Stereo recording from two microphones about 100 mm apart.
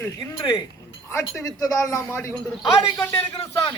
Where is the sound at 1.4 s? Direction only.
35° left (ahead or behind).